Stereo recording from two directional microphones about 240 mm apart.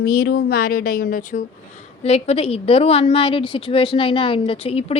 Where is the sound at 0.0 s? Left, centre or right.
Left.